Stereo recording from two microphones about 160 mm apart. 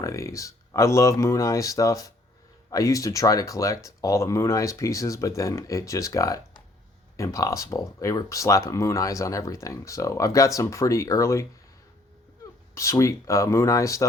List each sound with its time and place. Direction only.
0.0 s speech: 20° left (ahead or behind)
12.7 s speech: 20° left (ahead or behind)